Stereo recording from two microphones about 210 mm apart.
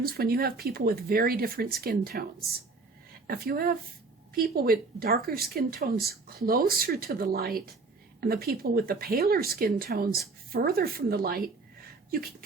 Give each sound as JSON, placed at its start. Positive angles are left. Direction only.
{"t": 0.0, "sound": "speech", "side_deg": -45}